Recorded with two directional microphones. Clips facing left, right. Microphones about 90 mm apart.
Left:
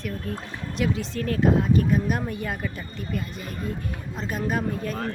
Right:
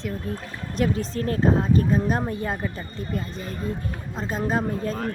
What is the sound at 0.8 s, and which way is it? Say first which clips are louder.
Speech: right 2 dB; 35° right (ahead or behind).